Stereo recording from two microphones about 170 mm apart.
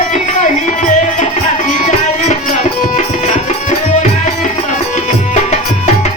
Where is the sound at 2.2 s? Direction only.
45° left (ahead or behind).